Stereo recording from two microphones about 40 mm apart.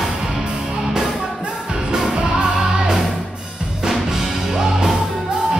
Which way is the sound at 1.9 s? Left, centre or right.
Right.